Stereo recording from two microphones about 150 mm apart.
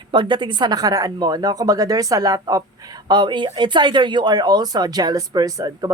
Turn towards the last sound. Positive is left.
turn(degrees=-25)  # may be behind; listen again after turning